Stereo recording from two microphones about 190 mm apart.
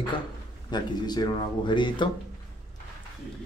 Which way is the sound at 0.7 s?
20° left (ahead or behind).